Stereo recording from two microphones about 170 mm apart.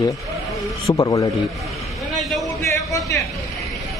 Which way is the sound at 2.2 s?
Centre (ahead or behind).